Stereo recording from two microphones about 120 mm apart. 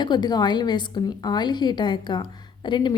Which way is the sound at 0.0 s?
35° left (ahead or behind).